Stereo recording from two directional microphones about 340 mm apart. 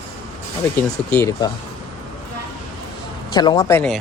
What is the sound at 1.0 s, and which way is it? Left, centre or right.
Speech, centre.